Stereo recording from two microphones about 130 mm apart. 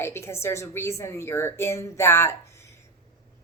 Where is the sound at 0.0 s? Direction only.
20° left (ahead or behind).